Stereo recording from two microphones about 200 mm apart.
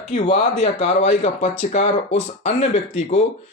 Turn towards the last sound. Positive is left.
turn(degrees=35)  # may be behind; listen again after turning